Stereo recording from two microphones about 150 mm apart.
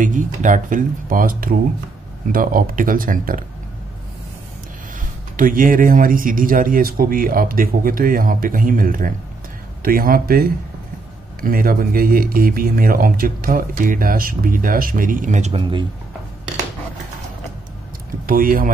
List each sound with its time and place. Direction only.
0.0 s speech: 60° right (ahead or behind)
5.3 s speech: 65° right (ahead or behind)
15.5 s speech: 30° right (ahead or behind)
18.2 s speech: 70° right (ahead or behind)